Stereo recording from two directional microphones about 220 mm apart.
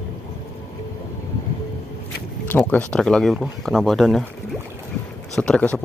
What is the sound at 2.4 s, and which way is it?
Speech, 10° left (ahead or behind).